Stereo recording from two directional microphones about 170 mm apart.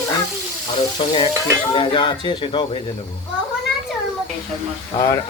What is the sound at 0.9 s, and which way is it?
Speech, 30° left (ahead or behind).